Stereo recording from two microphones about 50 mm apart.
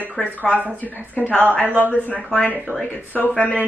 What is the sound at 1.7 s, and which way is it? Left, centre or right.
Speech, right.